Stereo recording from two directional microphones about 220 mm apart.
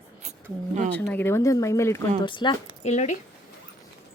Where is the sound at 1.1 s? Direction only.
10° left (ahead or behind); by 3.2 s 35° left (ahead or behind).